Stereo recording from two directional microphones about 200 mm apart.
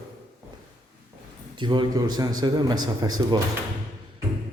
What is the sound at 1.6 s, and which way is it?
A man's voice, 25° right (ahead or behind).